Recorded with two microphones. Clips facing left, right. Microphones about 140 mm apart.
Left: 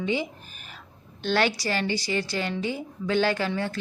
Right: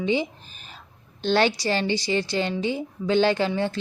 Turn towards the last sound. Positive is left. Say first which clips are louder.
# right 4 dB
turn(degrees=-25)  # may be behind; listen again after turning